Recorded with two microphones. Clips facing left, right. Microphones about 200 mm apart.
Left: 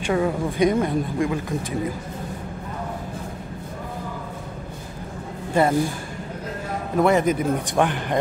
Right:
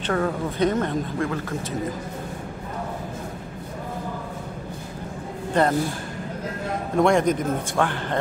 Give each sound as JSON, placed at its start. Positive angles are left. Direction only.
{"t": 0.0, "sound": "a woman's voice", "side_deg": 10}
{"t": 5.5, "sound": "speech", "side_deg": 10}
{"t": 7.0, "sound": "a man's voice", "side_deg": 5}
{"t": 7.7, "sound": "a woman's voice", "side_deg": 15}